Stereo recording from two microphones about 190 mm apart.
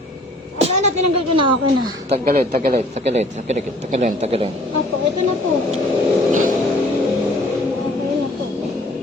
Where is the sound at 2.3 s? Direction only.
50° right (ahead or behind).